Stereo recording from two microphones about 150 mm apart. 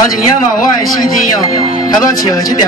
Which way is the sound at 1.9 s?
25° left (ahead or behind).